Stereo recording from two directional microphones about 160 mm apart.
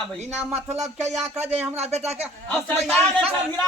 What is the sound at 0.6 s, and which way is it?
A man's voice, 45° right (ahead or behind).